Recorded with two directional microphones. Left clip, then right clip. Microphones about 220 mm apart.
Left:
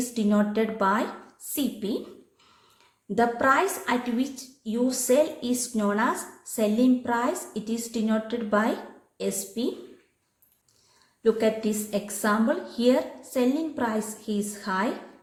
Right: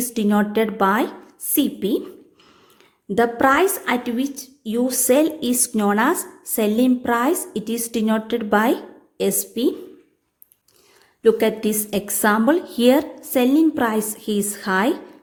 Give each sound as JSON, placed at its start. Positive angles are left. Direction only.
{"t": 0.1, "sound": "a woman's voice", "side_deg": -45}
{"t": 3.2, "sound": "a woman's voice", "side_deg": -45}
{"t": 11.2, "sound": "a woman's voice", "side_deg": -45}